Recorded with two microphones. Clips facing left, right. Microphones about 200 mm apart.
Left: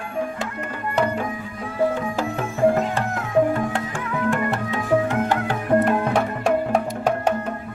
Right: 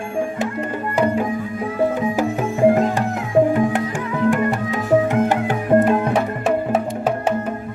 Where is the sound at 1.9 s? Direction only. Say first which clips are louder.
Right 5 dB; 15° right (ahead or behind).